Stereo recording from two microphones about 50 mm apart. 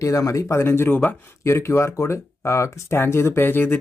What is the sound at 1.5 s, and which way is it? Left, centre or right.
Speech, left.